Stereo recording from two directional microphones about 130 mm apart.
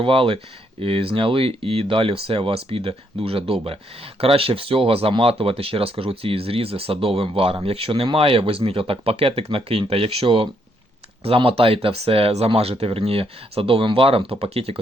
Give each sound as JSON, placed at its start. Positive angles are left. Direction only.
{"t": 0.0, "sound": "speech", "side_deg": -45}